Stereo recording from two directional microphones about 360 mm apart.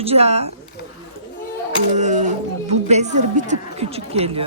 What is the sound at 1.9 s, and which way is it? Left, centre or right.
Speech, centre.